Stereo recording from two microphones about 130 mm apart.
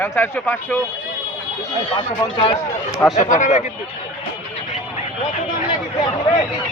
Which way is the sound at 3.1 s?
70° left (ahead or behind).